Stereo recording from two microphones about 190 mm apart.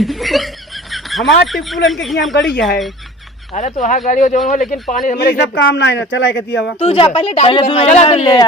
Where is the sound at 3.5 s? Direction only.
35° left (ahead or behind); by 6.7 s 65° left (ahead or behind).